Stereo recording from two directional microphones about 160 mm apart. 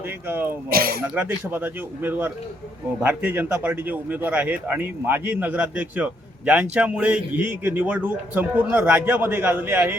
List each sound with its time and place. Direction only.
0.3 s speech: 15° right (ahead or behind)
0.7 s speech: 65° right (ahead or behind)
1.0 s speech: 10° right (ahead or behind)